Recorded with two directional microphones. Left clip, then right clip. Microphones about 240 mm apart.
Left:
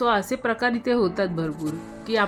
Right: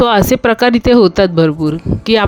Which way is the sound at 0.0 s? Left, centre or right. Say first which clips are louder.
Right 12 dB; right.